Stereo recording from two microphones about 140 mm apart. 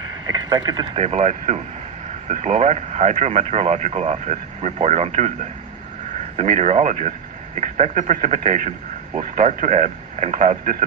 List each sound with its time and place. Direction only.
0.3 s speech: 30° right (ahead or behind)
0.9 s speech: 50° right (ahead or behind)
6.3 s speech: 50° right (ahead or behind)